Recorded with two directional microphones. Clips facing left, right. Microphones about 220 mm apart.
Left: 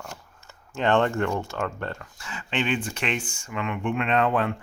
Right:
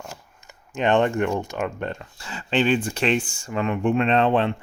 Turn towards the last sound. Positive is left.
turn(degrees=-25)  # may be behind; listen again after turning